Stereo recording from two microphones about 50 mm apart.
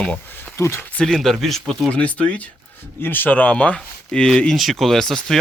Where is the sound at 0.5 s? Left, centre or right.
Left.